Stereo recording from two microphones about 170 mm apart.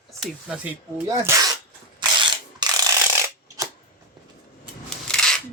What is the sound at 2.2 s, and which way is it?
Rub, 25° right (ahead or behind).